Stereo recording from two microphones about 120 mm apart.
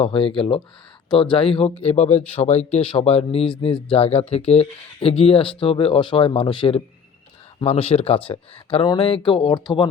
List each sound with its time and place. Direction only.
0.0 s speech: 50° left (ahead or behind)
1.8 s speech: 60° left (ahead or behind); by 9.8 s 35° left (ahead or behind)